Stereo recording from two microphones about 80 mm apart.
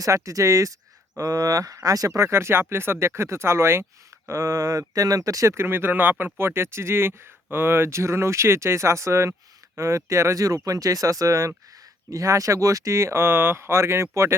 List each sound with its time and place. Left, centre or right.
0.0 s speech: right